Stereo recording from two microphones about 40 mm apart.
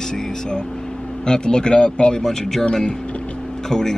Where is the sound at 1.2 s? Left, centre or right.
Centre.